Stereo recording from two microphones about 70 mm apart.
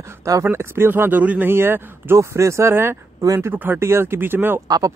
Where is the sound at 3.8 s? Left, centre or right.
Right.